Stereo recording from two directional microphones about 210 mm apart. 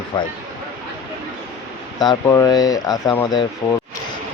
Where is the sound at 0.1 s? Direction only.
20° left (ahead or behind).